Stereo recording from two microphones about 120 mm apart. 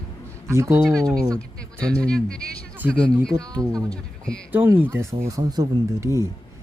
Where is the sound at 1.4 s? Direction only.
10° left (ahead or behind).